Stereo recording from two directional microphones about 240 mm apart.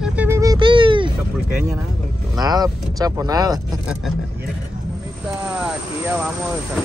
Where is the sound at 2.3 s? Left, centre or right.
Centre.